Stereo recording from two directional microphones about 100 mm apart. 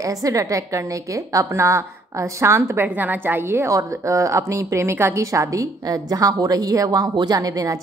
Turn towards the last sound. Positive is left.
turn(degrees=-35)  # may be behind; listen again after turning